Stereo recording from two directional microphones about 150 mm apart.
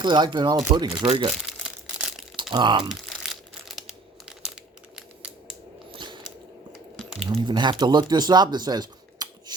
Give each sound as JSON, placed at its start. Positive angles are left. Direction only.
{"t": 0.0, "sound": "speech", "side_deg": -30}
{"t": 1.0, "sound": "speech", "side_deg": -40}
{"t": 1.5, "sound": "crumpling", "side_deg": -5}
{"t": 2.3, "sound": "speech", "side_deg": -30}
{"t": 2.9, "sound": "crumpling", "side_deg": 0}
{"t": 5.9, "sound": "biting", "side_deg": -30}
{"t": 7.0, "sound": "a sound", "side_deg": 0}
{"t": 7.3, "sound": "speech", "side_deg": -30}